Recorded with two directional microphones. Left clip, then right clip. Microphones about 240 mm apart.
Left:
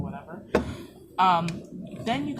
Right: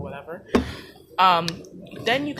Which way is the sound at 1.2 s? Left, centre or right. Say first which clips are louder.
Right 4 dB; right.